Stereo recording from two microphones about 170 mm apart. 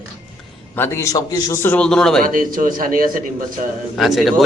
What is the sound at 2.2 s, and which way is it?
Speech, 55° right (ahead or behind).